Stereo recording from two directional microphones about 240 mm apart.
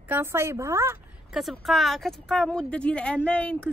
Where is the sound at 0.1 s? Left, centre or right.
Centre.